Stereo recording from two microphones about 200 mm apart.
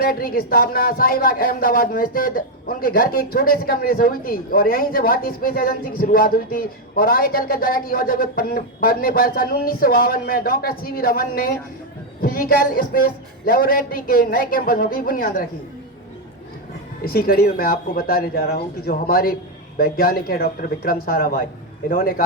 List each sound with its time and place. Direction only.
0.0 s speech: 45° left (ahead or behind)
17.0 s speech: 45° left (ahead or behind)